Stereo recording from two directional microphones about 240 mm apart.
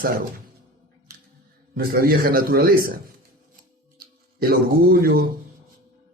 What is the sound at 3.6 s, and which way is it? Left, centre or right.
Music, right.